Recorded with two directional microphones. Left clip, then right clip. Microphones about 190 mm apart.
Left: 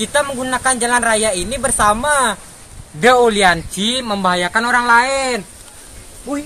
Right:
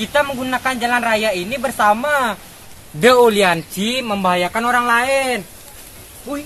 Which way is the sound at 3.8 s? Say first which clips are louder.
Left 1 dB; 25° right (ahead or behind).